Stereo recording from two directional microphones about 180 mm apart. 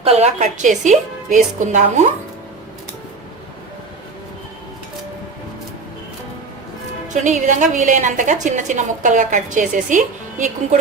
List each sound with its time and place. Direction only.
0.0 s a woman's voice: 35° right (ahead or behind)
7.1 s a woman's voice: 40° right (ahead or behind)